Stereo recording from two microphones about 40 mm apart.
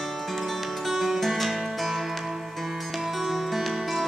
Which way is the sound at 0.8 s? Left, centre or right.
Centre.